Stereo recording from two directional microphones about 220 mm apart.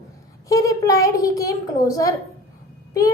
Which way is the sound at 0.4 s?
15° left (ahead or behind).